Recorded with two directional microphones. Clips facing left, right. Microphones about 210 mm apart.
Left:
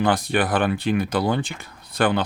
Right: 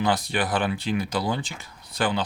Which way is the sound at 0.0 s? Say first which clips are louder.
Left 4 dB; 55° left (ahead or behind).